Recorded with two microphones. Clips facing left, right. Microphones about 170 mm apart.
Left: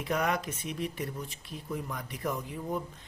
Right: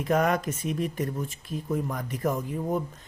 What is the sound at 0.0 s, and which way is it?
Speech, 45° right (ahead or behind).